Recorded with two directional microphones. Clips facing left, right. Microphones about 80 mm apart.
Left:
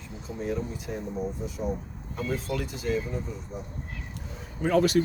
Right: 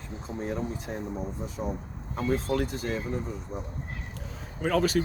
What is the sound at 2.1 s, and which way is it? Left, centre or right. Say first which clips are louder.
Speech: right 3 dB; right.